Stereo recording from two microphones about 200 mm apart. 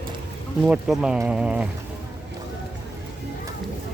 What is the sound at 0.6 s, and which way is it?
Speech, 5° right (ahead or behind).